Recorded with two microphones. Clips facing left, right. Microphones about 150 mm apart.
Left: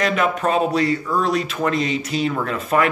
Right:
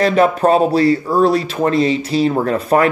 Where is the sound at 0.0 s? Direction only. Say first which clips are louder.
Right 7 dB; 35° right (ahead or behind).